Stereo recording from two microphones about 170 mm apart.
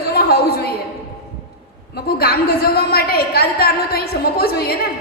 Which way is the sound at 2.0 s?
65° left (ahead or behind).